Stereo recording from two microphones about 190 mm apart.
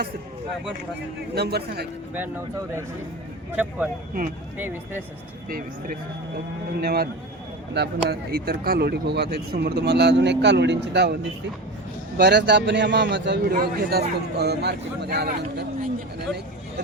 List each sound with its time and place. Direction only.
1.4 s speech: 60° right (ahead or behind)
2.1 s speech: 10° right (ahead or behind)
5.5 s speech: 50° right (ahead or behind)